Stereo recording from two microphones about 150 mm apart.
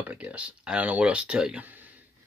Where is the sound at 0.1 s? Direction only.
10° right (ahead or behind).